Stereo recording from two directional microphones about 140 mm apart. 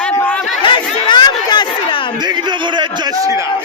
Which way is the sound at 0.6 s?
35° left (ahead or behind).